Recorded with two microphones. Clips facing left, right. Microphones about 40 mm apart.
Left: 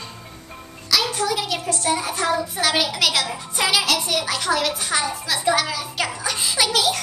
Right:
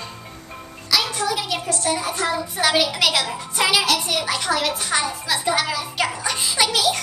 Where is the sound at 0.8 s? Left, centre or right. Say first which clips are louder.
Even; centre.